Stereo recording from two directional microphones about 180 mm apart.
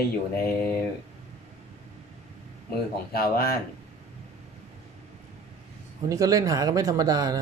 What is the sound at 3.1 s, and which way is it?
Speech, 60° left (ahead or behind).